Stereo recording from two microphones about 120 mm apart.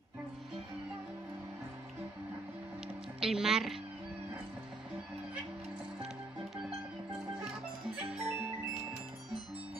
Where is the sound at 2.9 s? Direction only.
5° right (ahead or behind).